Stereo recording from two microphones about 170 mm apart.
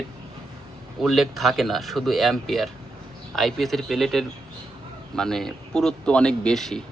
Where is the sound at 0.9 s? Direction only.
Centre (ahead or behind).